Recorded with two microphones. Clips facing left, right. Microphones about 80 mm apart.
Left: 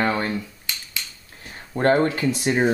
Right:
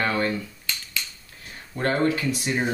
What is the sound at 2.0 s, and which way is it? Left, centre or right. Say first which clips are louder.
Speech: left 2 dB; left.